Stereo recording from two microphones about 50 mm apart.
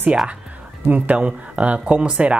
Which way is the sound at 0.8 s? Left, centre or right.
Right.